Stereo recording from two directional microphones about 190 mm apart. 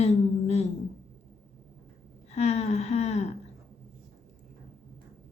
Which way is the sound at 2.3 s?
35° left (ahead or behind).